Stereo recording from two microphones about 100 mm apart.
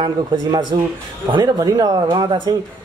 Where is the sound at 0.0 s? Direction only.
50° right (ahead or behind).